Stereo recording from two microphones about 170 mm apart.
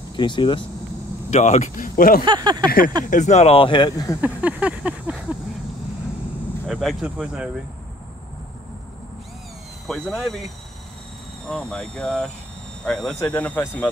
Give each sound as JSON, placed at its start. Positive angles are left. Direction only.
{"t": 0.1, "sound": "speech", "side_deg": 30}
{"t": 1.3, "sound": "speech", "side_deg": 45}
{"t": 2.2, "sound": "speech", "side_deg": -25}
{"t": 3.1, "sound": "speech", "side_deg": 45}
{"t": 4.2, "sound": "a sound", "side_deg": -10}
{"t": 6.7, "sound": "speech", "side_deg": 0}
{"t": 9.8, "sound": "speech", "side_deg": 5}